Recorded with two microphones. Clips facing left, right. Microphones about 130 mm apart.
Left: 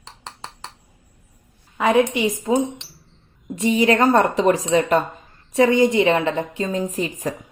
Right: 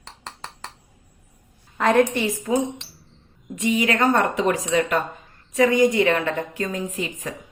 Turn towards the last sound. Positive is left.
turn(degrees=35)  # may be behind; listen again after turning